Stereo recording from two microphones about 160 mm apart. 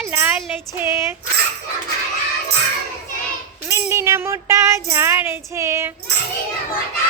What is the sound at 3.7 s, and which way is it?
Music, 20° right (ahead or behind).